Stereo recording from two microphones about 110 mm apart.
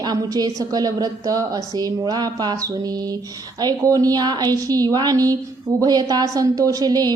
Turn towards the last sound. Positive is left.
turn(degrees=-35)  # may be behind; listen again after turning